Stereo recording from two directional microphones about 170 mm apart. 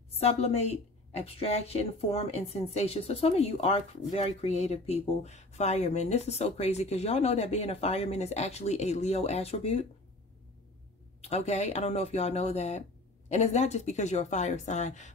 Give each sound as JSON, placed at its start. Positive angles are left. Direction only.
{"t": 0.2, "sound": "speech", "side_deg": 35}
{"t": 11.1, "sound": "speech", "side_deg": 40}